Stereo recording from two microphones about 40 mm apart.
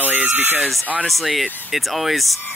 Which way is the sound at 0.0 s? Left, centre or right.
Right.